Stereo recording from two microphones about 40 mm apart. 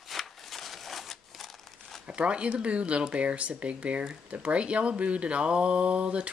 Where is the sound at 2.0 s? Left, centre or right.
Right.